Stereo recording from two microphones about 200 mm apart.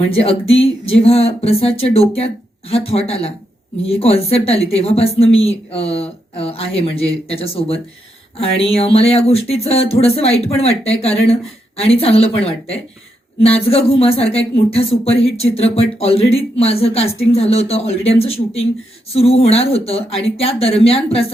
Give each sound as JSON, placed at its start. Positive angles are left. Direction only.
{"t": 0.2, "sound": "speech", "side_deg": 30}